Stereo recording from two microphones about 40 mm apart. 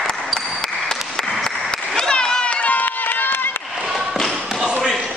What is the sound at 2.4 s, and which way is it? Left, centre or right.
Run, left.